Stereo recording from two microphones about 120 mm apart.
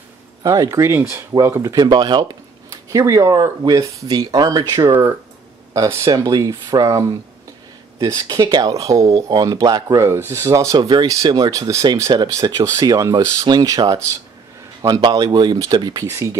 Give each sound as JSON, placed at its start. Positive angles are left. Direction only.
{"t": 0.4, "sound": "speech", "side_deg": -30}
{"t": 2.7, "sound": "speech", "side_deg": -30}
{"t": 16.1, "sound": "speech", "side_deg": -25}